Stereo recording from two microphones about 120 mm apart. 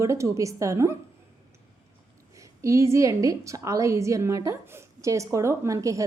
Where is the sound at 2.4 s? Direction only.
25° right (ahead or behind).